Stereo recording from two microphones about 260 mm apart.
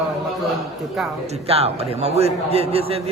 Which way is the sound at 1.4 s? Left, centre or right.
Right.